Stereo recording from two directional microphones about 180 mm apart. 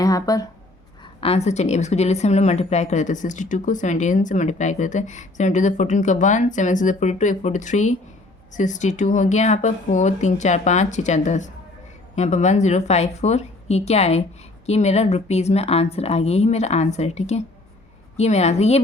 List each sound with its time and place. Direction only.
0.0 s speech: 20° left (ahead or behind)
1.2 s a woman's voice: 35° left (ahead or behind)